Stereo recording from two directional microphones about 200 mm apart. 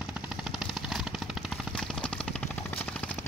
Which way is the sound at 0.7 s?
Centre (ahead or behind).